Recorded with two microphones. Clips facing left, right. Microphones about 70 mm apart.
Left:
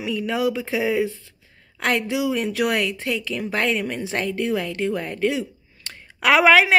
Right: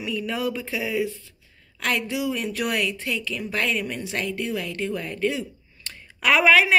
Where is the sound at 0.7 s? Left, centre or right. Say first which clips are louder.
Left 4 dB; left.